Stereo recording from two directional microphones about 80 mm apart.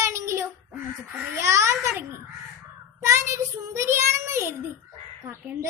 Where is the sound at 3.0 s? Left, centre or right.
Right.